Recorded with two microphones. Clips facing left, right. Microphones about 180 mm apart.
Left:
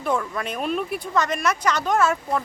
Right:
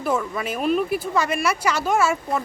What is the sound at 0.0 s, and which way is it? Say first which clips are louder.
Speech: right 1 dB; 5° right (ahead or behind).